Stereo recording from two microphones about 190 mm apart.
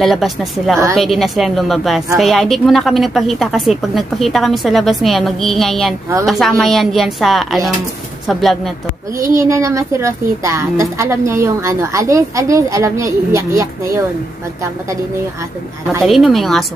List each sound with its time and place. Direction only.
0.0 s a woman's voice: centre (ahead or behind)
9.4 s a woman's voice: 15° right (ahead or behind)
16.0 s a woman's voice: centre (ahead or behind)